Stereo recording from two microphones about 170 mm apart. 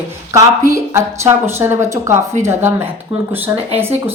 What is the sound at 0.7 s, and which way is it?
A woman's voice, 15° right (ahead or behind).